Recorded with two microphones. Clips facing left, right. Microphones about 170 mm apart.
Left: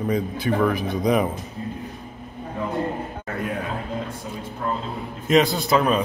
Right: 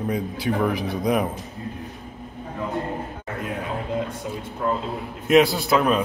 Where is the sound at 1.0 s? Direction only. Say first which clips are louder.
Left 2 dB; centre (ahead or behind).